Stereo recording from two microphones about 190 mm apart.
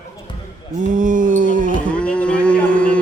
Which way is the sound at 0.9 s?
45° right (ahead or behind).